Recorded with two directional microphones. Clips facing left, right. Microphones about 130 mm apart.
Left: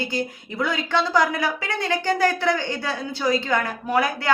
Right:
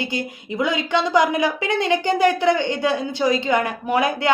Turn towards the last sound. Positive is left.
turn(degrees=-20)  # may be behind; listen again after turning